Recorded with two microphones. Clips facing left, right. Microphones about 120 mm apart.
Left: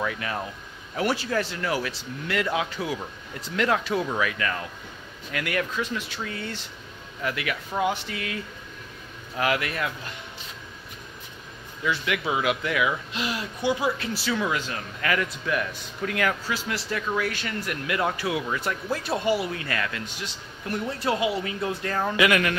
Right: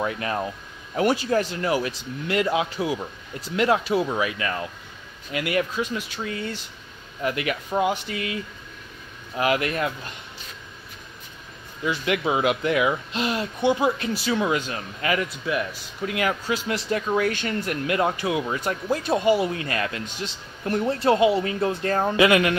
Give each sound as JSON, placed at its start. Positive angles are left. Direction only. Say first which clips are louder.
{"t": 0.0, "sound": "speech", "louder": "right 3 dB", "side_deg": -35}
{"t": 0.9, "sound": "speech", "louder": "right 4 dB", "side_deg": -20}
{"t": 7.2, "sound": "speech", "louder": "right 4 dB", "side_deg": -25}
{"t": 9.4, "sound": "speech", "louder": "right 3 dB", "side_deg": -20}
{"t": 11.8, "sound": "speech", "louder": "right 3 dB", "side_deg": -20}